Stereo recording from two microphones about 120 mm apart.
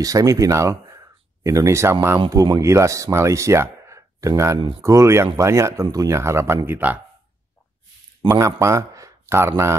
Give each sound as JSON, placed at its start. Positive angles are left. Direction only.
{"t": 0.0, "sound": "speech", "side_deg": -30}
{"t": 8.4, "sound": "speech", "side_deg": -25}